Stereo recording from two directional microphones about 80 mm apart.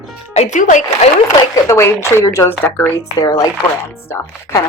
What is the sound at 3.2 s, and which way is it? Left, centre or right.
Speech, left.